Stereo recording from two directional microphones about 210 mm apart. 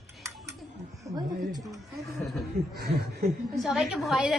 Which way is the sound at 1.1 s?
15° right (ahead or behind).